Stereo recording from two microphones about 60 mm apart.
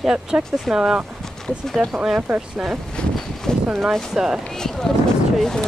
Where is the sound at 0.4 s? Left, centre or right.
Centre.